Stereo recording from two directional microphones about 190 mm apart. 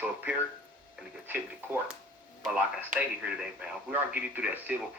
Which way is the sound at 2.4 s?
10° right (ahead or behind).